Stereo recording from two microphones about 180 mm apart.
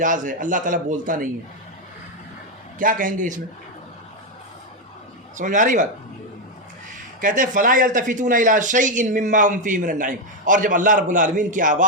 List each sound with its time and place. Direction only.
0.0 s speech: 45° right (ahead or behind)
2.7 s speech: 50° right (ahead or behind)
5.4 s speech: 45° right (ahead or behind)
7.2 s speech: 45° right (ahead or behind)